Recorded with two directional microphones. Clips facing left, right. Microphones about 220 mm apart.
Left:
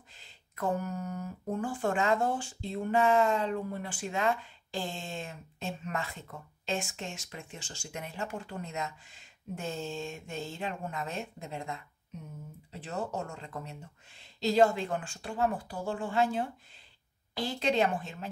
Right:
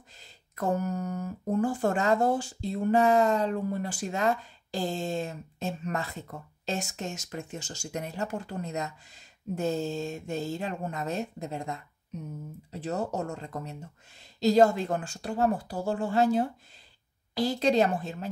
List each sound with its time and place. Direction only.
0.2 s speech: 40° right (ahead or behind)